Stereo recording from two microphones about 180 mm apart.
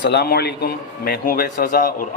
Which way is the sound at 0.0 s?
60° left (ahead or behind).